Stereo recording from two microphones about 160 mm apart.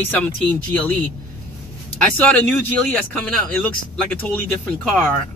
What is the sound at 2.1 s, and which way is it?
Speech, 10° left (ahead or behind).